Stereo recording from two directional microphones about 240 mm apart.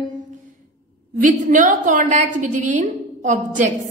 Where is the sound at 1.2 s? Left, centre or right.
Right.